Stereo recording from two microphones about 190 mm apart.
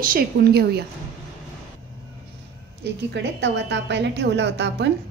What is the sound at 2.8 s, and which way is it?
A woman's voice, 65° right (ahead or behind).